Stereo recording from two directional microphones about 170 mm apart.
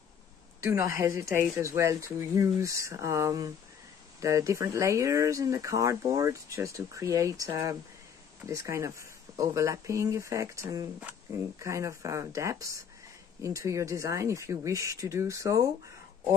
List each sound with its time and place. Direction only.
0.6 s speech: 15° right (ahead or behind)